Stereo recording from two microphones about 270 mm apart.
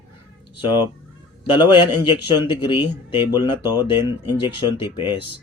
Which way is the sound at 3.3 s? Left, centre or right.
Centre.